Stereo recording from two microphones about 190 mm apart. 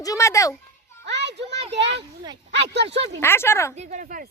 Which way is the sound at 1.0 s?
65° right (ahead or behind).